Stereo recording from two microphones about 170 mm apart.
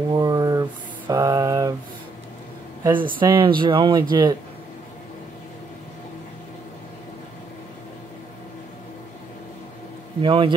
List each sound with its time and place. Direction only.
0.1 s a sound: 20° right (ahead or behind)
2.8 s speech: 30° right (ahead or behind)
10.2 s a man's voice: 30° right (ahead or behind)